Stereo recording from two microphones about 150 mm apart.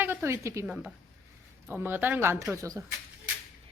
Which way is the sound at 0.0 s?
15° right (ahead or behind).